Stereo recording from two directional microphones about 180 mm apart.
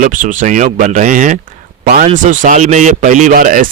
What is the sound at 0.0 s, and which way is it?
Speech, 45° right (ahead or behind).